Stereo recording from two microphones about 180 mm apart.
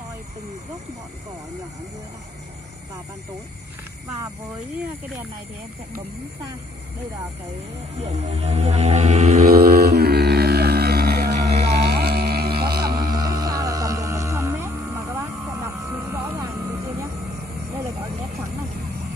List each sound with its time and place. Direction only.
8.0 s music: 35° right (ahead or behind)
9.5 s mantra: 60° right (ahead or behind)
11.7 s music: 60° right (ahead or behind)
13.1 s music: 20° right (ahead or behind)